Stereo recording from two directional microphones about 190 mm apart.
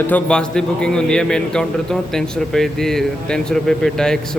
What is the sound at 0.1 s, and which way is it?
A man's voice, 5° left (ahead or behind).